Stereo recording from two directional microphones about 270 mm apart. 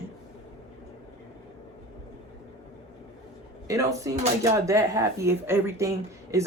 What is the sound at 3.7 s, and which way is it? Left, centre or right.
Speech, centre.